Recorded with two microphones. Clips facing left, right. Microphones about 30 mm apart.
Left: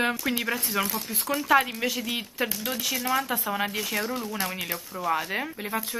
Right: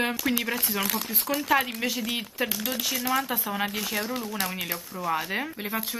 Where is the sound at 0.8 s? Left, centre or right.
Right.